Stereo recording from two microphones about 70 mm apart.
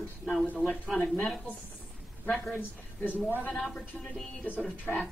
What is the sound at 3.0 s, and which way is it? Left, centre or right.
Speech, right.